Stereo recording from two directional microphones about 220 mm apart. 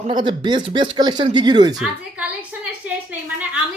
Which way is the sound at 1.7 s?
5° right (ahead or behind).